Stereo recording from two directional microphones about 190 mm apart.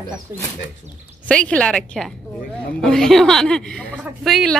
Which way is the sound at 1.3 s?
5° left (ahead or behind).